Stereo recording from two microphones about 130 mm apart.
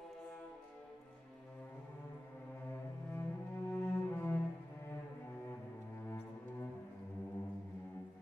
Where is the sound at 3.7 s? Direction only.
15° left (ahead or behind).